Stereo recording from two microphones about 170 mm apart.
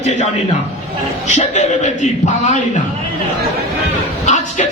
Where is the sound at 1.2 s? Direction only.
45° left (ahead or behind).